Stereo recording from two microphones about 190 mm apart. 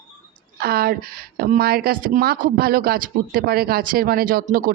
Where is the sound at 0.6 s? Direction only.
55° right (ahead or behind).